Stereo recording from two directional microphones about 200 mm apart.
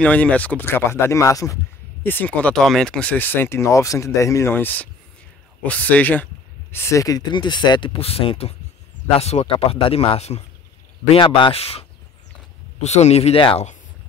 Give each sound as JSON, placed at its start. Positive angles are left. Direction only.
{"t": 0.0, "sound": "speech", "side_deg": 5}
{"t": 12.8, "sound": "speech", "side_deg": 35}